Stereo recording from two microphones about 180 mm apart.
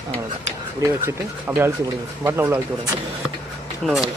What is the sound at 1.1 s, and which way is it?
Speech, 15° right (ahead or behind).